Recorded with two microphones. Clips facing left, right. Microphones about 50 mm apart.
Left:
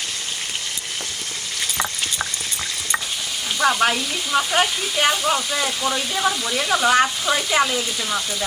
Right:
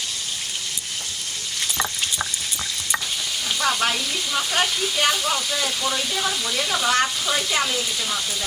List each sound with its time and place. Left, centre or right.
3.6 s speech: centre